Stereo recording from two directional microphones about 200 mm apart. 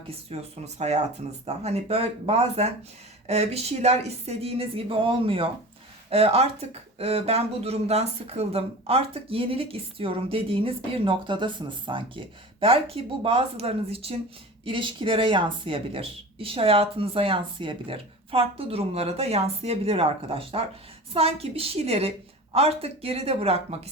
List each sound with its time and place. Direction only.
0.1 s speech: 30° right (ahead or behind)